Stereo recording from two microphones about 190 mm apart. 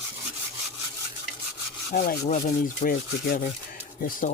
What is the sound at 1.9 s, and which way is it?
Speech, 50° left (ahead or behind).